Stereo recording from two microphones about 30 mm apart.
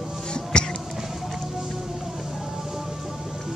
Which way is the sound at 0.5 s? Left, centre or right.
Left.